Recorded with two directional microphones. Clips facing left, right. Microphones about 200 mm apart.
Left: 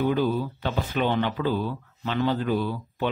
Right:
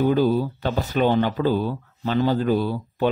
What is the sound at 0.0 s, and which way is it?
Speech, 40° right (ahead or behind).